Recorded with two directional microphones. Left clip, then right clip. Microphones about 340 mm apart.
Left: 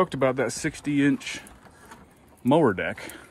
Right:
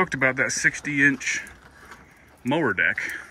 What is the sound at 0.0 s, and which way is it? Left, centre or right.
Speech, centre.